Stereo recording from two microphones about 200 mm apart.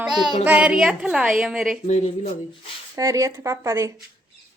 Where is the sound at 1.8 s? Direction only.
35° left (ahead or behind).